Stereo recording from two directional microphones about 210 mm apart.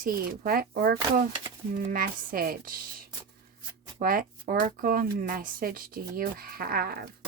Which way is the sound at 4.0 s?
45° right (ahead or behind).